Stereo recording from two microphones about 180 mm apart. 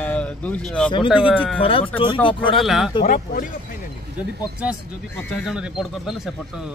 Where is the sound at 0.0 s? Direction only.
10° left (ahead or behind).